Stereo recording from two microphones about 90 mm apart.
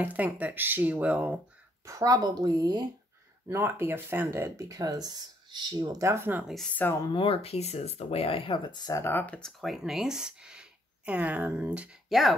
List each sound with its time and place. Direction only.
0.0 s speech: 20° right (ahead or behind)
1.9 s a woman's voice: 40° right (ahead or behind)
3.4 s speech: 30° right (ahead or behind)
6.4 s speech: centre (ahead or behind)
6.7 s speech: 20° left (ahead or behind)
7.1 s speech: 80° left
8.9 s speech: 25° left (ahead or behind)
9.4 s speech: centre (ahead or behind)
12.1 s speech: centre (ahead or behind)